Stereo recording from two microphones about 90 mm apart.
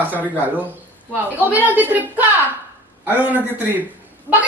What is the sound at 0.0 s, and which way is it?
A man's voice, 20° right (ahead or behind).